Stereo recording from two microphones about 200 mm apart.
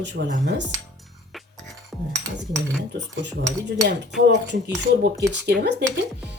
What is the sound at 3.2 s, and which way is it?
Speech, 60° right (ahead or behind).